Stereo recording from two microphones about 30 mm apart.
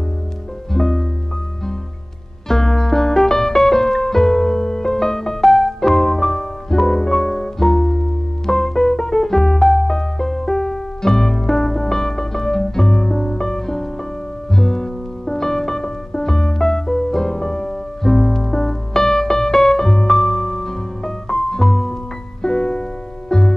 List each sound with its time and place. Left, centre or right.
0.7 s music: centre
2.4 s music: centre